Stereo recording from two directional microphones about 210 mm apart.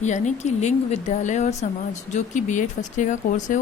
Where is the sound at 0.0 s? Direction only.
35° left (ahead or behind).